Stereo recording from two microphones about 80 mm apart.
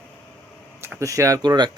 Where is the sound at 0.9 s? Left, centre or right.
Right.